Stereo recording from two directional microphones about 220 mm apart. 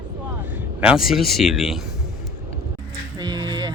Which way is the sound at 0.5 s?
5° right (ahead or behind).